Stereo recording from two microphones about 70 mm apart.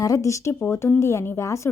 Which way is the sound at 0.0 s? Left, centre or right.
Left.